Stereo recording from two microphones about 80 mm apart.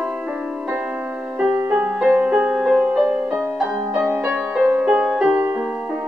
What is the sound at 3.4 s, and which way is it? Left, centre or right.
Music, right.